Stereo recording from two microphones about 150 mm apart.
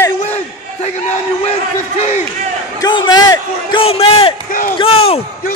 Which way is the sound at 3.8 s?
40° left (ahead or behind).